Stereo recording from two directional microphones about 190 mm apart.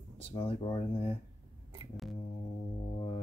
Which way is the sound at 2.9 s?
25° left (ahead or behind).